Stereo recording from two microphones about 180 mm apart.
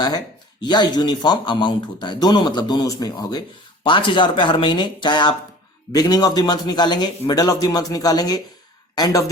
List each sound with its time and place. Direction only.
0.6 s speech: 25° left (ahead or behind)